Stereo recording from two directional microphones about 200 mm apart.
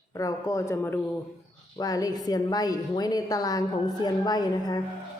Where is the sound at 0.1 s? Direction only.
15° left (ahead or behind).